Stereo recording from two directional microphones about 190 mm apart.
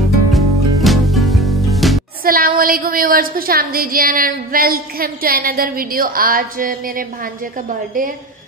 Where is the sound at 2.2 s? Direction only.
50° right (ahead or behind).